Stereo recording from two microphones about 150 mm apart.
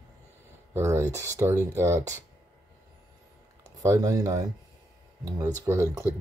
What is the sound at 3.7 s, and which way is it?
Speech, 20° right (ahead or behind).